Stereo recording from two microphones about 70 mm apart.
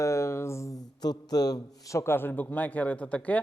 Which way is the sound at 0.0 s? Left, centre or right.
Left.